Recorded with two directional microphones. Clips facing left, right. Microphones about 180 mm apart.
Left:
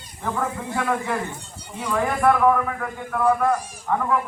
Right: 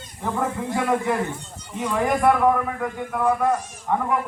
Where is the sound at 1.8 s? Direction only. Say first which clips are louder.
Right 1 dB; 15° right (ahead or behind).